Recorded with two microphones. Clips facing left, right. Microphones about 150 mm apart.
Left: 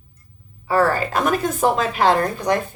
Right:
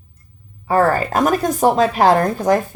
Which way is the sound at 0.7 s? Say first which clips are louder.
Right 3 dB; 45° right (ahead or behind).